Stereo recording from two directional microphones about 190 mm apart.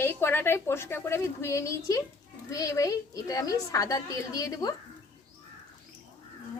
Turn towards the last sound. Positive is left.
turn(degrees=20)  # may be behind; listen again after turning